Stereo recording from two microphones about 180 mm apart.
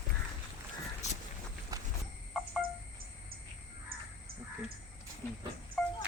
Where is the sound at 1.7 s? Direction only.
20° right (ahead or behind).